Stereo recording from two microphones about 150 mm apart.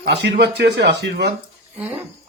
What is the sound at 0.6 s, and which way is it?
Speech, 90° right.